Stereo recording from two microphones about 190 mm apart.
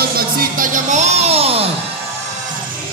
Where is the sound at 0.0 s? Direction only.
50° right (ahead or behind); by 1.7 s 30° right (ahead or behind).